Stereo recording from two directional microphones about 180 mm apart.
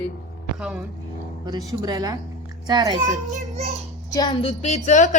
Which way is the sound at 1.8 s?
20° right (ahead or behind).